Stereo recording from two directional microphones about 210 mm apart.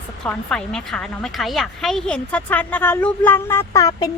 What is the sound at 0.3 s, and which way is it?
A woman's voice, 5° left (ahead or behind).